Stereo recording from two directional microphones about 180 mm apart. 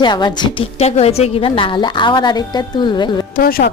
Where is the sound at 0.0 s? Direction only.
25° left (ahead or behind).